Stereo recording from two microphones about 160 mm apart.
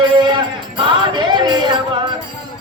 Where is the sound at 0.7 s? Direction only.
30° right (ahead or behind).